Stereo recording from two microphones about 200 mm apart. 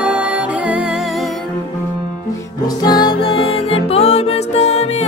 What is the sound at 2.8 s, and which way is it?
Music, 20° left (ahead or behind).